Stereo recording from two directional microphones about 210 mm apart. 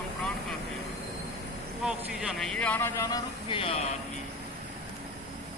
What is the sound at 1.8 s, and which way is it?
Speech, centre (ahead or behind).